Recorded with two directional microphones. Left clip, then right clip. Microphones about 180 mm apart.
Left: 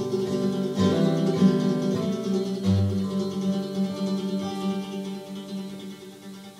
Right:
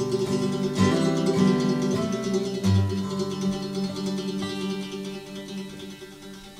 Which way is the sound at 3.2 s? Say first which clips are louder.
Even; 25° right (ahead or behind).